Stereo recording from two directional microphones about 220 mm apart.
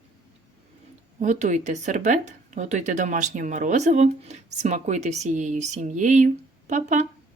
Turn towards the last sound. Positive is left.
turn(degrees=-35)  # may be behind; listen again after turning